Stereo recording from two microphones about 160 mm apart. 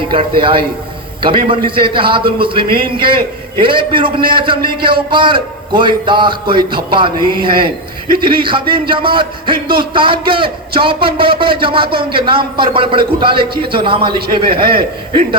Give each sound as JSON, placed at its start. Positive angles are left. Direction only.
{"t": 0.1, "sound": "a man's voice", "side_deg": -30}
{"t": 13.4, "sound": "a man's voice", "side_deg": -75}
{"t": 13.7, "sound": "a man's voice", "side_deg": -30}